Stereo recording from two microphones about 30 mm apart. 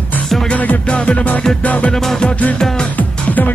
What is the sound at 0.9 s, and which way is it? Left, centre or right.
Music, left.